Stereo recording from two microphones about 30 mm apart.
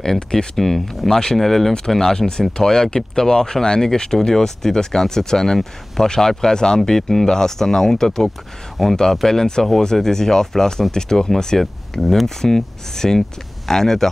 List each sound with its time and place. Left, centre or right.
0.0 s speech: centre
6.9 s speech: centre
8.8 s speech: centre